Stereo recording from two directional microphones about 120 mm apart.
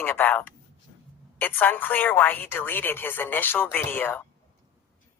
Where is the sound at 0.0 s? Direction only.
15° left (ahead or behind).